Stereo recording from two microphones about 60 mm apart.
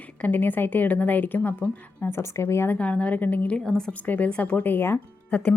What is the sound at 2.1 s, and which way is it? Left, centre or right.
Speech, left.